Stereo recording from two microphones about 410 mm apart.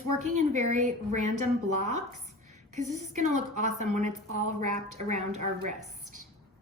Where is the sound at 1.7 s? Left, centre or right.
Centre.